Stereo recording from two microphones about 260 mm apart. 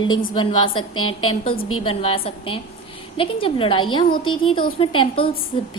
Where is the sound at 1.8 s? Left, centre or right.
Left.